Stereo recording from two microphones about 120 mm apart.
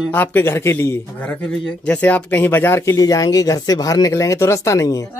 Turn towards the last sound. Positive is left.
turn(degrees=25)  # may be behind; listen again after turning